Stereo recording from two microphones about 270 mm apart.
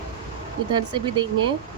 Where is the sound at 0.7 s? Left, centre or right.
Centre.